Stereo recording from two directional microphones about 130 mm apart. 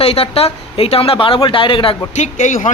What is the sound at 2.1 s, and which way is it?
Speech, 65° left (ahead or behind).